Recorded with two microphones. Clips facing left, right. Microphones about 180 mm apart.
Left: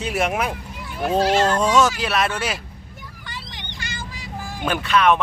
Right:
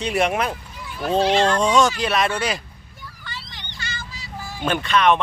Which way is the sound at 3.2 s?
15° left (ahead or behind).